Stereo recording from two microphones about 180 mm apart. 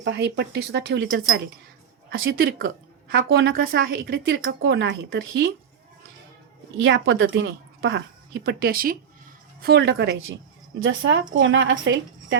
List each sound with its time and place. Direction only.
0.0 s speech: 80° right
2.0 s a woman's voice: 90° right
2.3 s a woman's voice: 55° right (ahead or behind)
3.2 s a woman's voice: 90° right
3.5 s a woman's voice: 55° right (ahead or behind); by 5.5 s 90° right
6.7 s a woman's voice: 90° right